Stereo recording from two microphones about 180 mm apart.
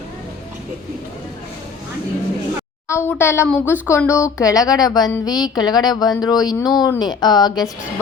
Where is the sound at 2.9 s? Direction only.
10° left (ahead or behind).